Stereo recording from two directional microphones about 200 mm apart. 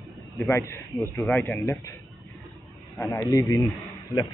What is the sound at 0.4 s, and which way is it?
A man's voice, 15° left (ahead or behind).